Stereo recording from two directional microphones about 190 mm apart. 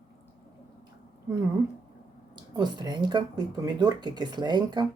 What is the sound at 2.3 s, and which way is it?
Speech, 20° right (ahead or behind).